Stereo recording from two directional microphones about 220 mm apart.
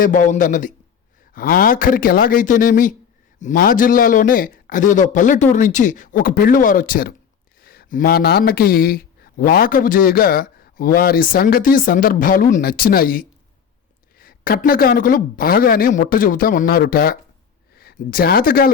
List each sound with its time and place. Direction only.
0.0 s speech: 35° left (ahead or behind)